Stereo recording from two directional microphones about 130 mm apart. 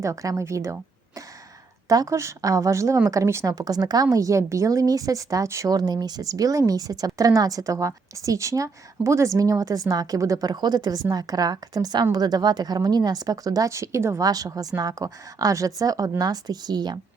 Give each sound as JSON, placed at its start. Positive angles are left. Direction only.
{"t": 0.0, "sound": "a woman's voice", "side_deg": -25}